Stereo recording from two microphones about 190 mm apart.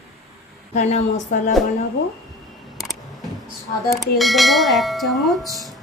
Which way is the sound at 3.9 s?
Centre (ahead or behind).